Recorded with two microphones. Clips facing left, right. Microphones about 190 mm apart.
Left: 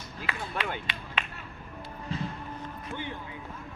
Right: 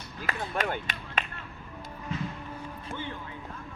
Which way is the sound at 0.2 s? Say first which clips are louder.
Right 3 dB; 45° right (ahead or behind).